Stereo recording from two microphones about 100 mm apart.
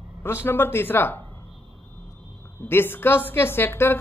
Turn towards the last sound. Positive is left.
turn(degrees=20)  # may be behind; listen again after turning